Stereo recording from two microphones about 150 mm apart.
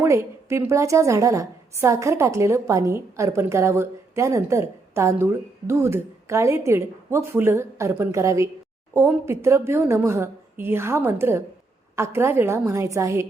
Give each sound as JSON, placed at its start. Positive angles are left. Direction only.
{"t": 0.0, "sound": "a woman's voice", "side_deg": -20}